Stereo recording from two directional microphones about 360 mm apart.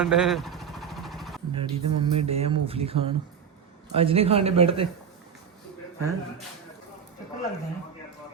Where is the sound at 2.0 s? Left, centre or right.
Centre.